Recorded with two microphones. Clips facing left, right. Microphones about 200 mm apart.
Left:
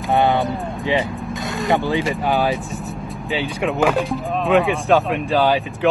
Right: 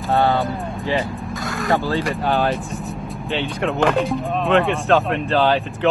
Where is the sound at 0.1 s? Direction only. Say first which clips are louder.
Left 1 dB; 15° left (ahead or behind).